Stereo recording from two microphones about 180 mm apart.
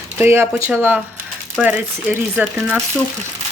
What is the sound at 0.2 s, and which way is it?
Speech, 15° right (ahead or behind).